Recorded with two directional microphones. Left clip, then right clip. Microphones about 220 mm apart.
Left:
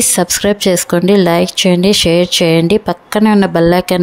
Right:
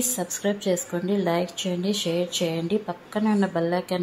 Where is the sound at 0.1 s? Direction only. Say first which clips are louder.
Left 14 dB; 45° left (ahead or behind).